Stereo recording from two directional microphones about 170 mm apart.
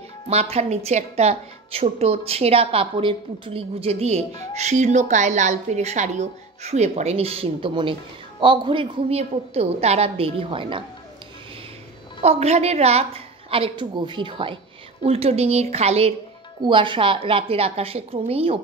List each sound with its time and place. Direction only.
0.3 s a woman's voice: 40° right (ahead or behind)
12.2 s a woman's voice: 40° right (ahead or behind)